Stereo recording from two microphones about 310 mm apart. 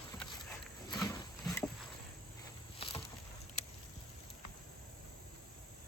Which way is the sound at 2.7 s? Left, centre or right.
Centre.